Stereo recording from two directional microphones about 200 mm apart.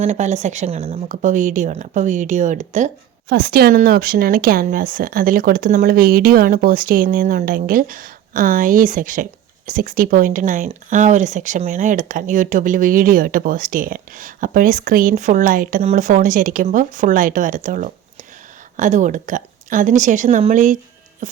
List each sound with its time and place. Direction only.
0.0 s speech: 35° right (ahead or behind)